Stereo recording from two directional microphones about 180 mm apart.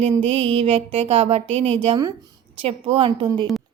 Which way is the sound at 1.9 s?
20° right (ahead or behind).